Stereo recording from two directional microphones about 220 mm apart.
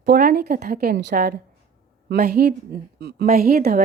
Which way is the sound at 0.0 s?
45° right (ahead or behind).